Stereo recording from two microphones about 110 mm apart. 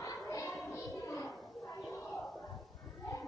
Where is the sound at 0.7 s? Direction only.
25° left (ahead or behind).